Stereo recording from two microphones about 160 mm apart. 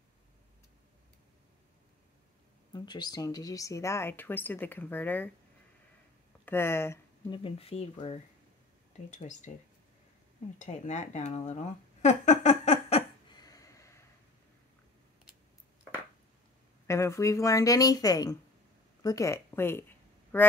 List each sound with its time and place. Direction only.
2.7 s speech: 25° left (ahead or behind)
6.4 s speech: 15° left (ahead or behind)
7.2 s speech: 35° left (ahead or behind)
9.1 s speech: 50° left (ahead or behind)
10.6 s speech: 45° left (ahead or behind)
12.0 s a sound: 45° left (ahead or behind)
13.3 s a sound: 25° left (ahead or behind)
16.8 s speech: 20° left (ahead or behind)